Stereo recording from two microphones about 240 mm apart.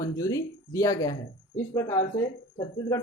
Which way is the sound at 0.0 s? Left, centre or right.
Centre.